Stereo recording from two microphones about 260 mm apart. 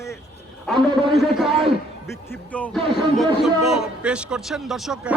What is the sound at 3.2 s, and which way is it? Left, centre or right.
A man's voice, centre.